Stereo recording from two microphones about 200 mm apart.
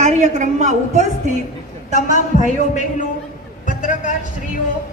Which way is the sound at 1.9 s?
40° left (ahead or behind).